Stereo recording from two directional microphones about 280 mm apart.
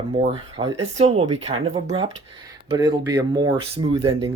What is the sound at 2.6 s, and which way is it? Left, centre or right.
Speech, centre.